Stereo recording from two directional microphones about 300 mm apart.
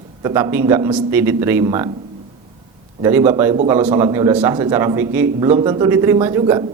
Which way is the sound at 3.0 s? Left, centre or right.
Centre.